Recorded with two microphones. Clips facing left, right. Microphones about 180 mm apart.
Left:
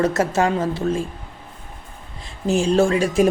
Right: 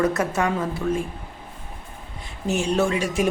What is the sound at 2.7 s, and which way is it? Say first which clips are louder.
Speech: left 5 dB; 30° left (ahead or behind).